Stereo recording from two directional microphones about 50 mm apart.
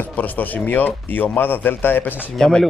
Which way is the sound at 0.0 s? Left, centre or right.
Left.